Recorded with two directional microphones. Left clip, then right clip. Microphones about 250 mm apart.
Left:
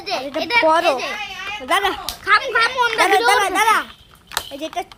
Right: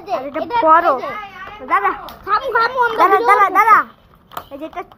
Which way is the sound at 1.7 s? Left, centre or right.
Left.